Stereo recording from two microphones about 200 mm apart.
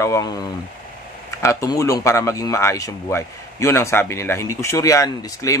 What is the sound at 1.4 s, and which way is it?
Speech, 15° left (ahead or behind).